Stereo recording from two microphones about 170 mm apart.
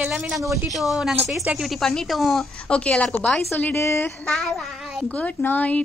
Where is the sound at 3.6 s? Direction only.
15° left (ahead or behind).